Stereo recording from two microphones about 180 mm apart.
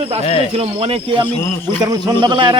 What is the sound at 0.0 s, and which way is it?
Speech, 35° right (ahead or behind).